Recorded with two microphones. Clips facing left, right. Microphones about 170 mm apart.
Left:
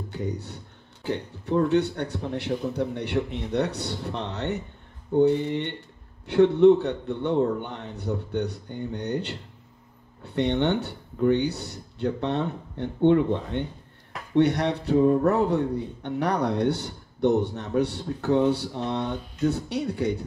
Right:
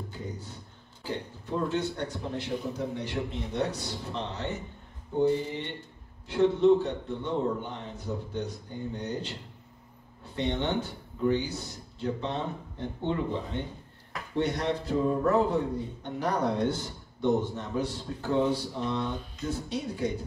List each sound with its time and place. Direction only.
0.1 s speech: 70° left (ahead or behind)